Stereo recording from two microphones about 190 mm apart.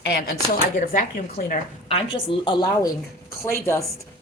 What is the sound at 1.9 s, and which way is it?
A woman's voice, 30° left (ahead or behind).